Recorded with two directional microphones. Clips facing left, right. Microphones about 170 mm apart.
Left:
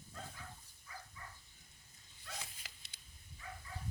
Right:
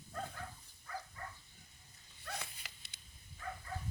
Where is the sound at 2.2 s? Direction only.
65° right (ahead or behind).